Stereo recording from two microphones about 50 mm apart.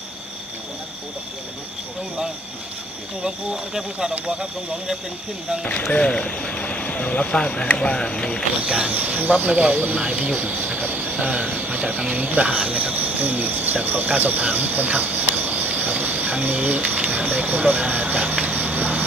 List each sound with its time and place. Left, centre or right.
3.2 s speech: centre
5.7 s speech: left
8.6 s speech: right
10.7 s train: right
12.1 s speech: right
13.7 s cricket: right